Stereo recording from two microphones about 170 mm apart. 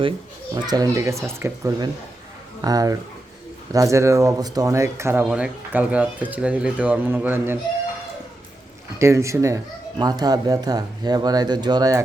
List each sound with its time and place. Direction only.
0.5 s speech: 20° right (ahead or behind)
9.0 s speech: 15° right (ahead or behind)